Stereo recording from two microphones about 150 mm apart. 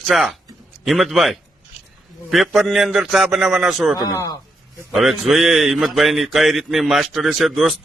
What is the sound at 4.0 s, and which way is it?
Speech, 25° left (ahead or behind).